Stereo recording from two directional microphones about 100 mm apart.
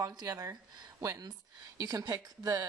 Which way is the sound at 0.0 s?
40° right (ahead or behind).